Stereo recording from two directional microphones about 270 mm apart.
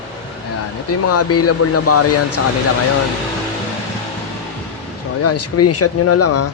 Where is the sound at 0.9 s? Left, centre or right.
Left.